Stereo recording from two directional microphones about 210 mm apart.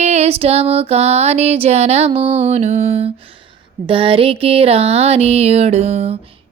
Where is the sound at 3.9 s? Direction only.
25° right (ahead or behind).